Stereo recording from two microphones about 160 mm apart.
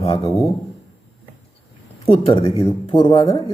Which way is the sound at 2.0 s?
35° left (ahead or behind).